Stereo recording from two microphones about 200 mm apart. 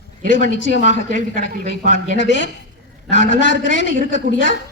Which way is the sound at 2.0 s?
65° left (ahead or behind).